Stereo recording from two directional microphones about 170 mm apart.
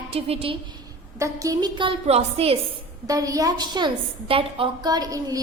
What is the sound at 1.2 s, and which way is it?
A woman's voice, 20° right (ahead or behind).